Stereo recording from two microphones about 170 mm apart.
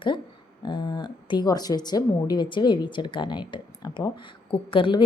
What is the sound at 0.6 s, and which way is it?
A woman's voice, 25° left (ahead or behind).